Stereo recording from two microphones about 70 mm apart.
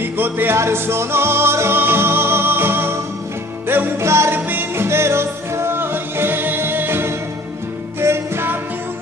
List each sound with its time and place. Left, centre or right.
0.0 s music: right